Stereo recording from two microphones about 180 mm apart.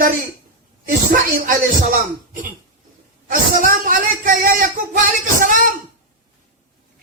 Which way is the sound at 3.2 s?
50° right (ahead or behind).